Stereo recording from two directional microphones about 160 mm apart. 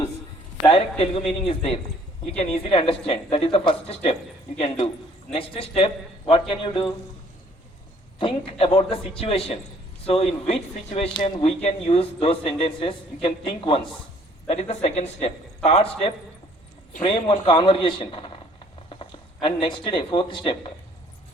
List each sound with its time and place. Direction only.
0.7 s speech: 40° left (ahead or behind)
5.3 s speech: 35° left (ahead or behind)
8.2 s speech: 35° left (ahead or behind)
11.6 s speech: 40° left (ahead or behind)
17.0 s speech: 30° left (ahead or behind)